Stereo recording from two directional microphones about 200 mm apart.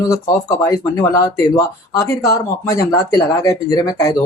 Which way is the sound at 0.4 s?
15° left (ahead or behind).